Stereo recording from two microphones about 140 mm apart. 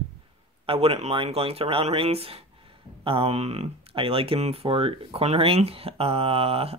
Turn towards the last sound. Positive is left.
turn(degrees=-45)  # may be behind; listen again after turning